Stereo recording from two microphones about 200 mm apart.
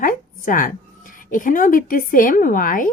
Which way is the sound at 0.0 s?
45° left (ahead or behind).